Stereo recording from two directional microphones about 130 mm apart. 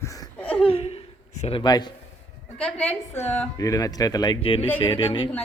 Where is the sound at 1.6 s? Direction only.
35° left (ahead or behind).